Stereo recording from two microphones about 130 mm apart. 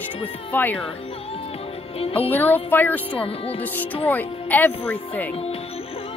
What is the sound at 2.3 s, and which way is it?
Speech, 15° left (ahead or behind).